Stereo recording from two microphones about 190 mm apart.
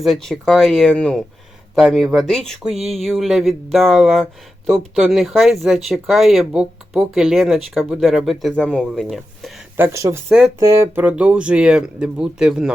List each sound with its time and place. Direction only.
0.0 s speech: centre (ahead or behind)
9.7 s speech: 15° right (ahead or behind)